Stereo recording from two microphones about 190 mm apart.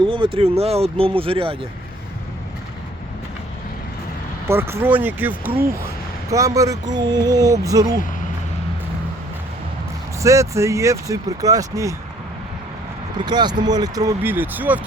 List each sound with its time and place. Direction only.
0.0 s speech: 25° right (ahead or behind)
4.4 s speech: 15° right (ahead or behind)
10.2 s speech: 15° right (ahead or behind)
13.1 s speech: 20° right (ahead or behind)